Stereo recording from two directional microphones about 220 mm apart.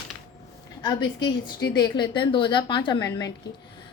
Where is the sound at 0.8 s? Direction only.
20° left (ahead or behind).